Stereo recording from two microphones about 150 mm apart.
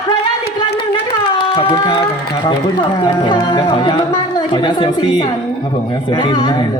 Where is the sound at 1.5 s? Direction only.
30° left (ahead or behind).